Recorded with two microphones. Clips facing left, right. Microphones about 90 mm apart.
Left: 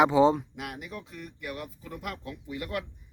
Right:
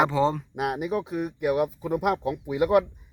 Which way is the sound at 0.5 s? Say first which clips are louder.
Right 12 dB; 65° right (ahead or behind).